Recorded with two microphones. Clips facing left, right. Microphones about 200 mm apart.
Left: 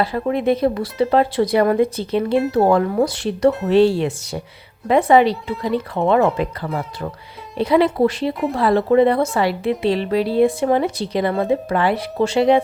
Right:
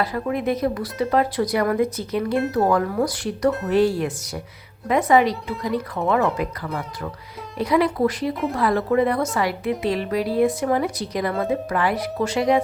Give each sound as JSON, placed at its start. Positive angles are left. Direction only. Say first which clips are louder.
{"t": 0.0, "sound": "a woman's voice", "louder": "left 4 dB", "side_deg": 30}